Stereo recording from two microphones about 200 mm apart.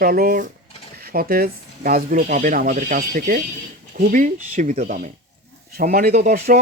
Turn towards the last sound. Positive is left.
turn(degrees=-45)  # may be behind; listen again after turning